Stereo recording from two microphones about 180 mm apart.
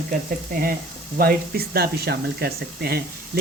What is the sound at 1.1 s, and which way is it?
Speech, 60° right (ahead or behind).